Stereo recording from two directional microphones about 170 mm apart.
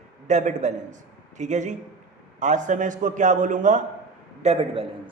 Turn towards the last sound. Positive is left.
turn(degrees=-35)  # may be behind; listen again after turning